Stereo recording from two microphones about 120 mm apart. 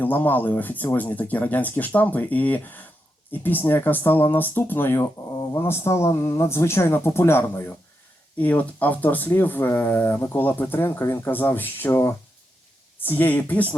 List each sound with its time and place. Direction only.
0.0 s speech: 15° left (ahead or behind)